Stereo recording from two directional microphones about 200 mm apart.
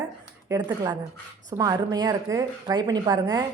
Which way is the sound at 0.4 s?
20° right (ahead or behind).